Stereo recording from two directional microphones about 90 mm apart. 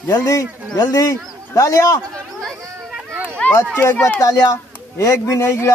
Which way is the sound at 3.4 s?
10° left (ahead or behind).